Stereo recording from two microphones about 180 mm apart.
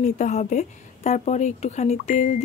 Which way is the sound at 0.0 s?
40° left (ahead or behind).